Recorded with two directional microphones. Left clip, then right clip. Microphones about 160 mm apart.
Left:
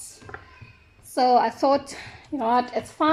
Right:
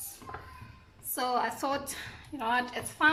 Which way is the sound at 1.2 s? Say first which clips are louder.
Left 11 dB; 40° left (ahead or behind).